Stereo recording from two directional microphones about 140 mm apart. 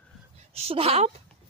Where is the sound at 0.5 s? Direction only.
45° right (ahead or behind).